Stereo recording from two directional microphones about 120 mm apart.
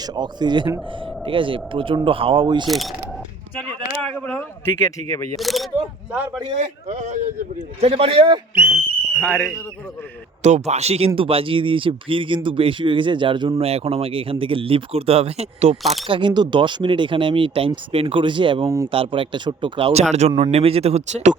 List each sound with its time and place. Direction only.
0.0 s speech: 35° right (ahead or behind)
2.6 s speech: centre (ahead or behind)
4.0 s a man's voice: 10° left (ahead or behind); by 5.3 s 25° left (ahead or behind)
5.4 s speech: centre (ahead or behind)
6.1 s a man's voice: 15° right (ahead or behind)
6.6 s speech: 80° right
7.8 s speech: 55° right (ahead or behind)
9.1 s speech: 15° left (ahead or behind)
10.4 s speech: 70° right (ahead or behind); by 13.5 s 40° right (ahead or behind)
13.6 s speech: 55° right (ahead or behind)
15.8 s speech: centre (ahead or behind)
16.0 s speech: 45° right (ahead or behind)
19.9 s speech: 65° right (ahead or behind)